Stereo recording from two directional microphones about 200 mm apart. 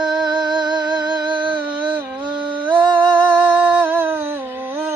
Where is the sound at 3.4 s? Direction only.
10° right (ahead or behind).